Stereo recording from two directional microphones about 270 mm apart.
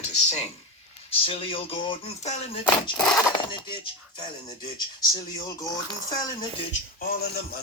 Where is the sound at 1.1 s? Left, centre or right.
Left.